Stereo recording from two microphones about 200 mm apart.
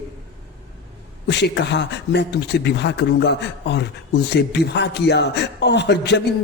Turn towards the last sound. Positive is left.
turn(degrees=60)  # may be behind; listen again after turning